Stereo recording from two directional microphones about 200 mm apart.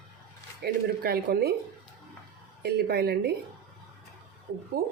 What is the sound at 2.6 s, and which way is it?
Speech, 50° right (ahead or behind).